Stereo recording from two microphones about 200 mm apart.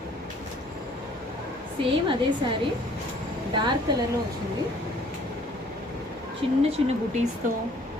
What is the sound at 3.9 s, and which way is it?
Speech, 20° right (ahead or behind).